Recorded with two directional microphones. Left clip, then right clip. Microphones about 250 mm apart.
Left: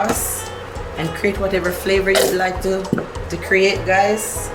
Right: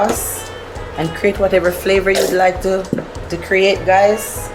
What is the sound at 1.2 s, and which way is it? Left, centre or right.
Speech, centre.